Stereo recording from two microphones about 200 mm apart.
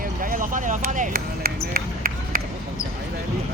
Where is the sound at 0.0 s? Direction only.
45° right (ahead or behind).